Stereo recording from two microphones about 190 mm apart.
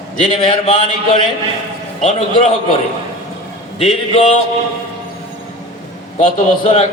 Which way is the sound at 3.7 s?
30° left (ahead or behind).